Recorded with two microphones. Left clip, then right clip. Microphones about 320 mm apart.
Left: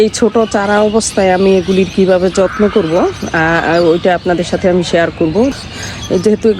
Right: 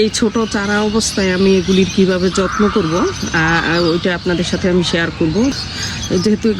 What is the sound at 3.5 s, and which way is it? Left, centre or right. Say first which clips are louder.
Speech: left 7 dB; left.